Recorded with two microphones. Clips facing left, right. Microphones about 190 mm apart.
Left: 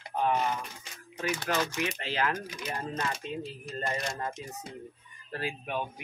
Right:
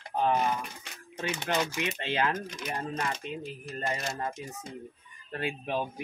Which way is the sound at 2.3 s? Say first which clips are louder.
Right 1 dB; 5° left (ahead or behind).